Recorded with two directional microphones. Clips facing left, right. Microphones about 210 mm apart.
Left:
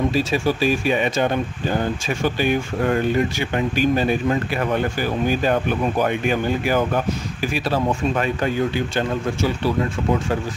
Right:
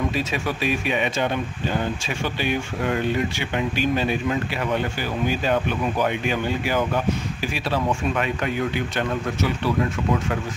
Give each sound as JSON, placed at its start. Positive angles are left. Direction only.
{"t": 0.1, "sound": "speech", "side_deg": 35}